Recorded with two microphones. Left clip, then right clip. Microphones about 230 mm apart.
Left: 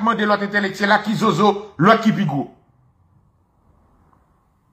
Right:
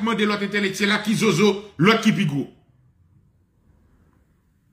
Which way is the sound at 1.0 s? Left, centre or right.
Centre.